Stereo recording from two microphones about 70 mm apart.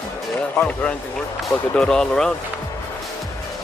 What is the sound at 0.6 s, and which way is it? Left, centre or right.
Speech, left.